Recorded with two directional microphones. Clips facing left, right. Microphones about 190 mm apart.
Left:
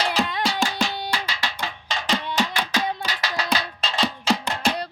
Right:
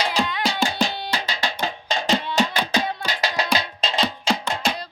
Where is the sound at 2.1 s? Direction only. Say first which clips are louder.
Right 2 dB; 20° right (ahead or behind).